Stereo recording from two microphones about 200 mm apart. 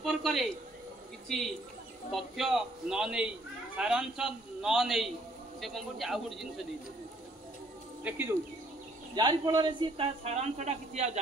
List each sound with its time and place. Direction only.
0.0 s a sound: centre (ahead or behind)
2.1 s a man's voice: centre (ahead or behind)
8.0 s speech: 10° right (ahead or behind); by 11.1 s 35° right (ahead or behind)